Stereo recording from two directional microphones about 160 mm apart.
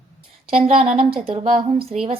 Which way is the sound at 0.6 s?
40° right (ahead or behind).